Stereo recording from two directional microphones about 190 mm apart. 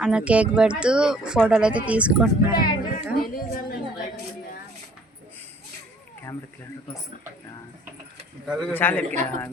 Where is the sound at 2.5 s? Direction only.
50° left (ahead or behind).